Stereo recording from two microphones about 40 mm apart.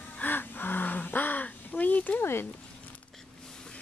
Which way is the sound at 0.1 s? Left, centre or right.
Left.